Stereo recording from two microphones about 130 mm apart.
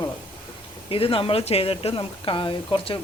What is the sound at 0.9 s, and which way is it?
Speech, 45° left (ahead or behind).